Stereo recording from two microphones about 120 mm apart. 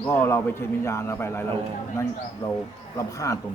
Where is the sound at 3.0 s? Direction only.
30° left (ahead or behind).